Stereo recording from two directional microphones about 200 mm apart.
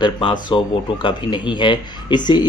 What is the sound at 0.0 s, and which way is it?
Speech, 25° left (ahead or behind).